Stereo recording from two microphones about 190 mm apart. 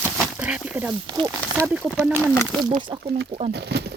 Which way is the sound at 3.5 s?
60° right (ahead or behind).